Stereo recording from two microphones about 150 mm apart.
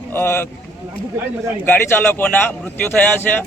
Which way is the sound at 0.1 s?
15° left (ahead or behind).